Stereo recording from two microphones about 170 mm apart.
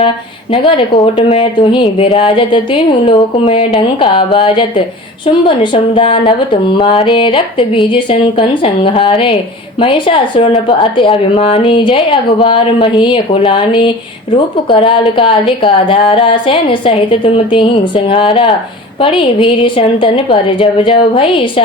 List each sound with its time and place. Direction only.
0.5 s a woman's voice: 30° left (ahead or behind)